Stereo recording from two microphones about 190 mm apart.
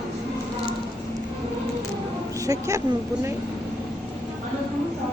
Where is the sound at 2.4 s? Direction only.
15° right (ahead or behind).